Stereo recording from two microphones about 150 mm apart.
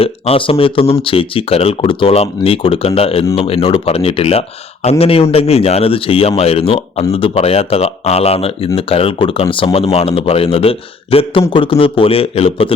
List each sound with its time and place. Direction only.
0.0 s speech: 40° left (ahead or behind)